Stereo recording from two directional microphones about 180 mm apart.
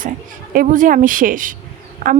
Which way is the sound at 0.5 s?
50° right (ahead or behind).